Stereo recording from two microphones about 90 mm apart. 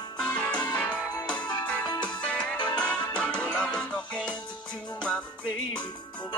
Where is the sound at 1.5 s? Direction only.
50° left (ahead or behind).